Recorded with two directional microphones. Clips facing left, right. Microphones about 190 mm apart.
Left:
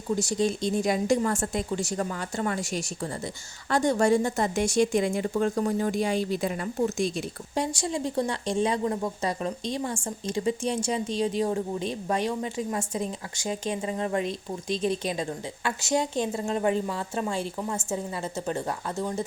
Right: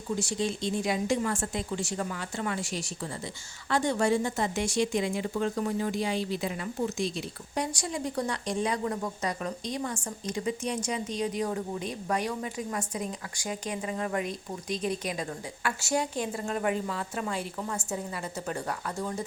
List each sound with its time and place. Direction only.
0.2 s speech: 40° left (ahead or behind)
7.5 s speech: 25° left (ahead or behind)